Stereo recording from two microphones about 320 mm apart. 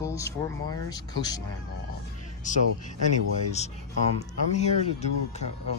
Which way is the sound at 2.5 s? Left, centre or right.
Left.